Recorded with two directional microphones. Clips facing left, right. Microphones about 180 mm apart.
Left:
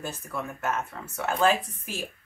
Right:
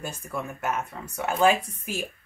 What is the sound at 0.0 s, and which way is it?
Speech, 15° right (ahead or behind).